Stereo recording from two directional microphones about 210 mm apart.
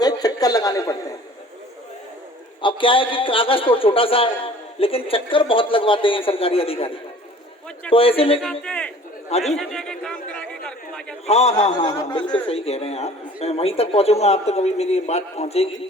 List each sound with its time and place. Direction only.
0.0 s a sound: 20° left (ahead or behind)
2.6 s a man's voice: 25° left (ahead or behind)
7.9 s a man's voice: 25° left (ahead or behind)
8.6 s a man's voice: 5° left (ahead or behind)
11.3 s a man's voice: 30° left (ahead or behind)